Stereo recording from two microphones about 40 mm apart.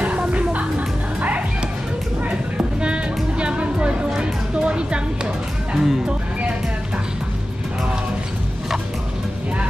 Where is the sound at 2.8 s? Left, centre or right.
Right.